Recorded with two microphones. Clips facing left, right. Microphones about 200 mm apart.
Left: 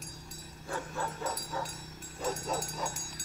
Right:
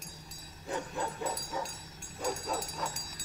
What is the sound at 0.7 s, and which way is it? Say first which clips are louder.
Bow-wow: right 1 dB; 20° right (ahead or behind).